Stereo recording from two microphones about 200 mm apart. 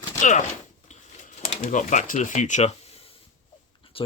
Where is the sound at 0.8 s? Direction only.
35° left (ahead or behind).